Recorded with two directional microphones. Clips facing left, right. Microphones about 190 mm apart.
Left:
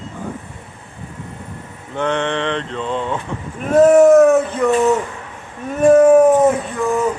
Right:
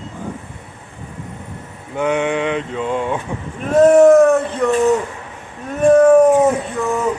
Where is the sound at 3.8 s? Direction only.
Centre (ahead or behind).